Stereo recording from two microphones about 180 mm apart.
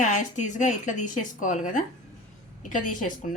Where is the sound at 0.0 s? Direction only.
45° left (ahead or behind).